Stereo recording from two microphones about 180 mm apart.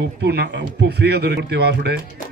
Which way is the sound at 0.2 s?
65° right (ahead or behind).